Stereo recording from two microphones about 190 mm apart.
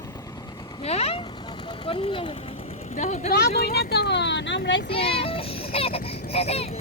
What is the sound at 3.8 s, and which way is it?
Vehicle, 60° left (ahead or behind).